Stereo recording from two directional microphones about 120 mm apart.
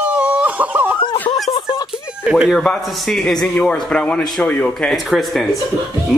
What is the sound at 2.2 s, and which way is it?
A man's voice, 5° right (ahead or behind).